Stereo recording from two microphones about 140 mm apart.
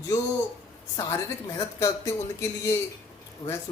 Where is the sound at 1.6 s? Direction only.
20° left (ahead or behind).